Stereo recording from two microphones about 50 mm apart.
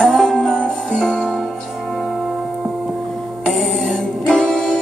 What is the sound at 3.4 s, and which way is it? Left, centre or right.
Music, centre.